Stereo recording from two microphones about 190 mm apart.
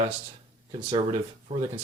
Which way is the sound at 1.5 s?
35° right (ahead or behind).